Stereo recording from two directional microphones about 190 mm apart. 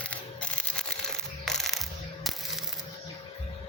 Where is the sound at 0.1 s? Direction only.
5° left (ahead or behind).